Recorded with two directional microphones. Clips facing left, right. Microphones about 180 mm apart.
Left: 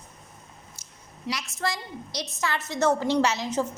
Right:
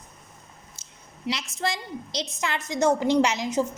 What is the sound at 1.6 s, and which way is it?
A woman's voice, 20° right (ahead or behind).